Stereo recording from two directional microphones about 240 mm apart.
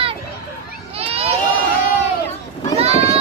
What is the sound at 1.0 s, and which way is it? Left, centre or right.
Crowd, right.